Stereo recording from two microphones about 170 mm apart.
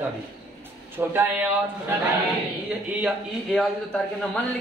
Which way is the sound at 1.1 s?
10° right (ahead or behind).